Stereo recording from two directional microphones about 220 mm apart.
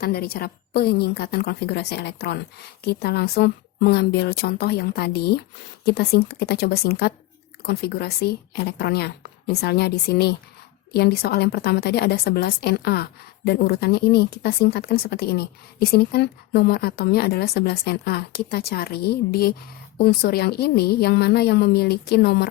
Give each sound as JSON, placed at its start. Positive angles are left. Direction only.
{"t": 0.0, "sound": "a woman's voice", "side_deg": 45}